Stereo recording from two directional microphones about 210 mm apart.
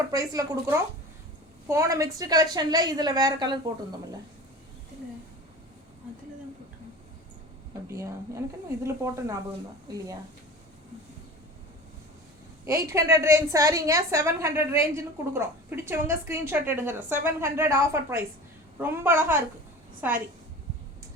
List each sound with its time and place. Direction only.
0.1 s a woman's voice: 15° right (ahead or behind)
7.9 s a woman's voice: 15° right (ahead or behind)
12.6 s a woman's voice: 15° right (ahead or behind)